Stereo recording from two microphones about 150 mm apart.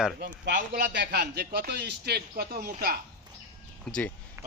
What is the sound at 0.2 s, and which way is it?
Speech, 90° right.